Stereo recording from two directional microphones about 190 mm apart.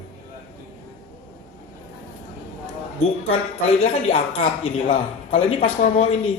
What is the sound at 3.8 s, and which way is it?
A man's voice, 35° left (ahead or behind).